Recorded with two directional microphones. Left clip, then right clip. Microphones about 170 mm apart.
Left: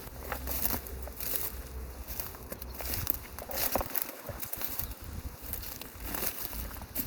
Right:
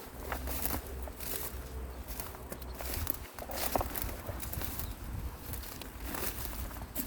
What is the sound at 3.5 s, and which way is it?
Boat, 90° left.